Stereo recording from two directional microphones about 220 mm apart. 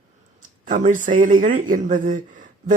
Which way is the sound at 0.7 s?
35° right (ahead or behind).